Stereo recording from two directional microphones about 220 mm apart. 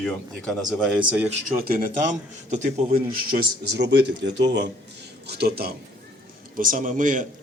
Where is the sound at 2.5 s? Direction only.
35° right (ahead or behind).